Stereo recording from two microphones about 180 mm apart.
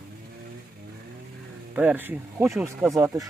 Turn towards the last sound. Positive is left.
turn(degrees=-15)  # may be behind; listen again after turning